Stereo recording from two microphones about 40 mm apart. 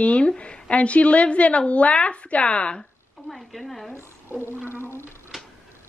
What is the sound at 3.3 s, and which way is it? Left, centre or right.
Speech, centre.